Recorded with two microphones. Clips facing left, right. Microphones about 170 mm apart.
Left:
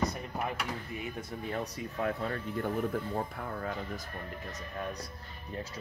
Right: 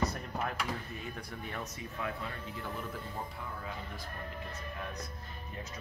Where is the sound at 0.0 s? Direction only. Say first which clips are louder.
Left 1 dB; 15° left (ahead or behind).